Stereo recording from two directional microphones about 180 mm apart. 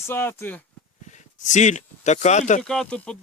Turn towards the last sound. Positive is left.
turn(degrees=5)  # may be behind; listen again after turning